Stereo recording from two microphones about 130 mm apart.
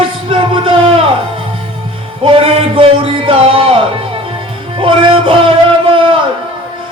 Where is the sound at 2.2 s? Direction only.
45° right (ahead or behind).